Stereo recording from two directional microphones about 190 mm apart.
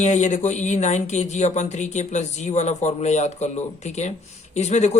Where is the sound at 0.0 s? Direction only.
40° left (ahead or behind).